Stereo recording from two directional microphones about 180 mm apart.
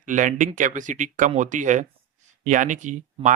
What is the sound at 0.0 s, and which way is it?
Speech, 45° right (ahead or behind).